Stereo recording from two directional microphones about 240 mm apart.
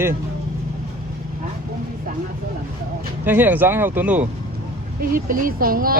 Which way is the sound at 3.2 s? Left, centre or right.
Centre.